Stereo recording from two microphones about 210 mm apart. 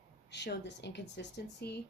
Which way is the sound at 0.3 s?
55° left (ahead or behind).